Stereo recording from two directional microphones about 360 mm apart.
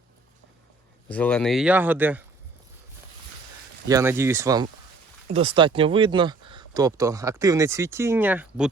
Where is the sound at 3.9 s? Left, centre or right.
Centre.